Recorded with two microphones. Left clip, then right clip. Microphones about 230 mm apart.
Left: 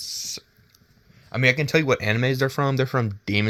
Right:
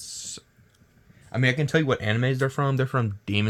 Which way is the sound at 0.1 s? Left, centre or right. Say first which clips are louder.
Left 6 dB; left.